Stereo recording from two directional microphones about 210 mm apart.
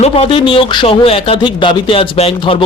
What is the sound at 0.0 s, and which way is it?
Speech, 25° left (ahead or behind).